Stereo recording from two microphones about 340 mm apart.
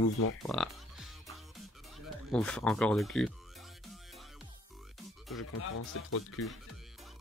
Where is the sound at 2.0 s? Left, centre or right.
Centre.